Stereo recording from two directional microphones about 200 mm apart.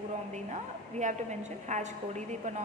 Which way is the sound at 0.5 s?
35° right (ahead or behind).